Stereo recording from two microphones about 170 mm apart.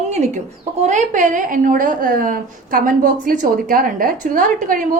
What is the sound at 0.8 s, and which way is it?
A woman's voice, 45° right (ahead or behind).